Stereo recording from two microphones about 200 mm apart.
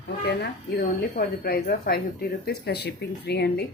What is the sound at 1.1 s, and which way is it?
Speech, 50° left (ahead or behind).